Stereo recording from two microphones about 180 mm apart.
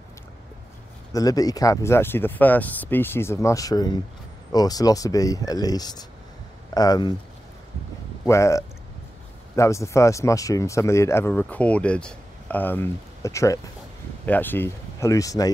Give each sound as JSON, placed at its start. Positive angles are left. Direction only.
{"t": 1.1, "sound": "speech", "side_deg": 20}
{"t": 8.3, "sound": "speech", "side_deg": 15}